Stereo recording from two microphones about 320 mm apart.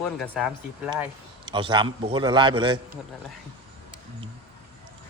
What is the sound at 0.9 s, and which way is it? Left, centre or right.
A man's voice, centre.